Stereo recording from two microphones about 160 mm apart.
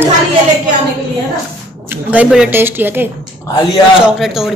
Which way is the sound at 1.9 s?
10° right (ahead or behind).